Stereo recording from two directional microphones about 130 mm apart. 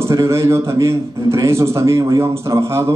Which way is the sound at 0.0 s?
20° right (ahead or behind).